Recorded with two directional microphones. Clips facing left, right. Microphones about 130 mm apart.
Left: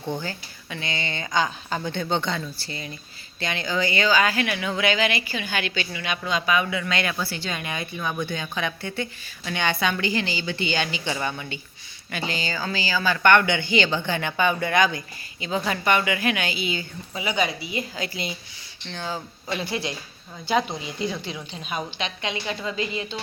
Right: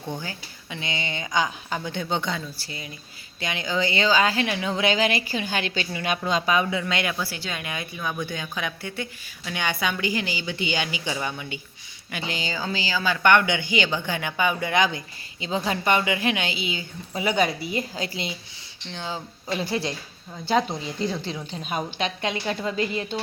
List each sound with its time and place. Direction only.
0.2 s a woman's voice: 15° right (ahead or behind); by 6.9 s 30° right (ahead or behind)
6.9 s speech: 15° right (ahead or behind)
17.2 s a woman's voice: 45° right (ahead or behind); by 18.3 s 30° right (ahead or behind)
18.9 s speech: 20° right (ahead or behind)
19.5 s a woman's voice: 35° right (ahead or behind)
20.6 s speech: 5° left (ahead or behind)
21.0 s a woman's voice: 35° right (ahead or behind)